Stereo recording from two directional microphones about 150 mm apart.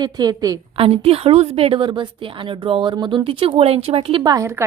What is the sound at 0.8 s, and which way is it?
Speech, 40° right (ahead or behind).